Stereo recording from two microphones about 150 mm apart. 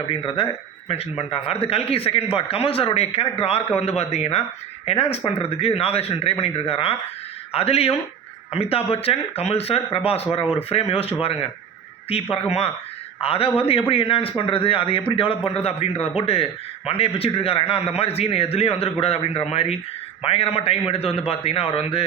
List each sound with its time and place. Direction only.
0.9 s speech: 40° left (ahead or behind)